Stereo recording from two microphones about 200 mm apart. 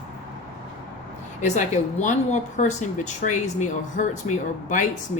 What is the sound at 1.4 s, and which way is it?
Speech, 40° left (ahead or behind).